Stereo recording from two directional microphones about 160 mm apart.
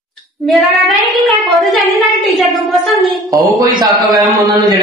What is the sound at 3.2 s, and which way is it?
Speech, 20° right (ahead or behind).